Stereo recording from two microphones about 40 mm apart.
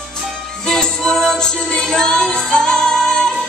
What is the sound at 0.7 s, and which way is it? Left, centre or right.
Music, centre.